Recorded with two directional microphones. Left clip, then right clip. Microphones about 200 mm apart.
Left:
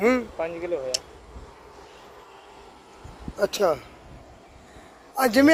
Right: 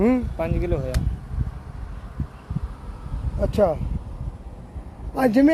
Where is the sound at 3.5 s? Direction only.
55° left (ahead or behind).